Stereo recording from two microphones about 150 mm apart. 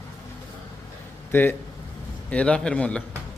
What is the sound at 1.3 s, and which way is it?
Speech, 15° left (ahead or behind).